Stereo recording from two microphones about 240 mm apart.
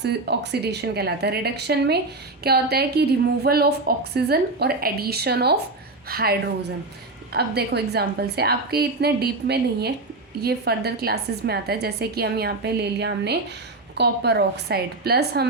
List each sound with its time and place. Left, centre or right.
0.0 s a woman's voice: right